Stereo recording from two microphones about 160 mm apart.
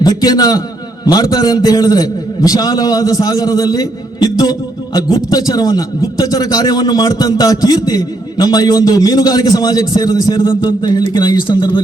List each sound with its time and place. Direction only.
0.0 s a man's voice: 25° left (ahead or behind)